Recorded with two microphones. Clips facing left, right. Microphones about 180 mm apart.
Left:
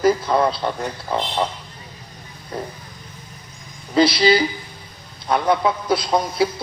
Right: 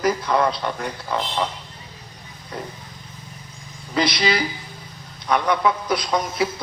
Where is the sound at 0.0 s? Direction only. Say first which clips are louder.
Left 3 dB; 30° left (ahead or behind).